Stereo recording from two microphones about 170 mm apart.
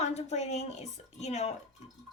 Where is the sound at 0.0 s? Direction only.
40° left (ahead or behind).